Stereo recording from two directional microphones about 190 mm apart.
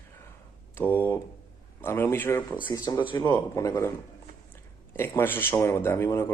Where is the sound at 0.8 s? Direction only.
10° left (ahead or behind).